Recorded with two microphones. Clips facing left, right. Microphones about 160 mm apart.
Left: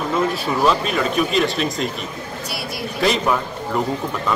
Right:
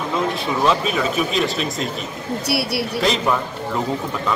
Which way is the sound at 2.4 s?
70° right (ahead or behind).